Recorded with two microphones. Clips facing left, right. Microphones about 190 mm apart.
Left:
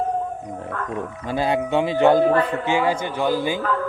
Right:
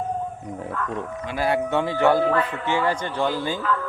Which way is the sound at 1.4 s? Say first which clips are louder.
Left 2 dB; 20° left (ahead or behind).